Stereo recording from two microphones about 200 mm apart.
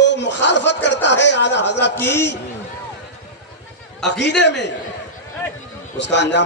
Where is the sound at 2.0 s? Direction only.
10° left (ahead or behind).